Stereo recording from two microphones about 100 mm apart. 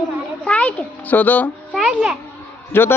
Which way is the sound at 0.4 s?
10° left (ahead or behind).